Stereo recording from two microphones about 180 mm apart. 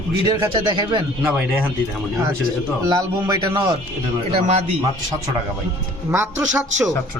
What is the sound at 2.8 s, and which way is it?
Speech, 20° right (ahead or behind).